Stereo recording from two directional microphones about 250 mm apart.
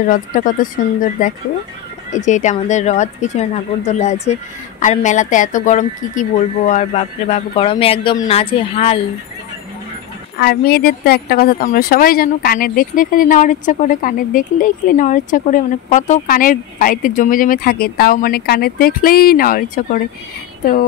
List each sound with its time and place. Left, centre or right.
0.1 s speech: left
10.3 s speech: left